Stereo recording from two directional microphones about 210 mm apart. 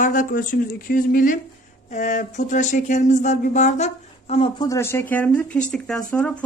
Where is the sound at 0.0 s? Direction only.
40° left (ahead or behind).